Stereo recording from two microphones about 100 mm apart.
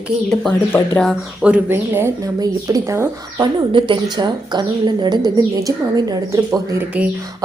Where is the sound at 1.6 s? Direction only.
20° right (ahead or behind).